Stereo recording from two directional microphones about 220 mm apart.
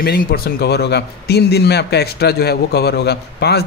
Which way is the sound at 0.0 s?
45° left (ahead or behind).